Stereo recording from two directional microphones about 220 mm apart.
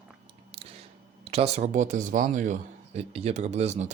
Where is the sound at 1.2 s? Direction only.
25° right (ahead or behind).